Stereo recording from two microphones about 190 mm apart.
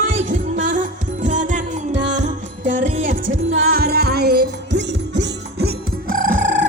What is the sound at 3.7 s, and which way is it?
Music, 55° right (ahead or behind).